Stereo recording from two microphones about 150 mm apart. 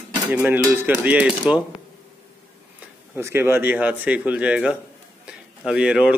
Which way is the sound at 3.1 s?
15° right (ahead or behind).